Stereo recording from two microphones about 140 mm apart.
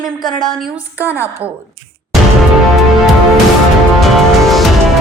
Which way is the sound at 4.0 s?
Centre (ahead or behind).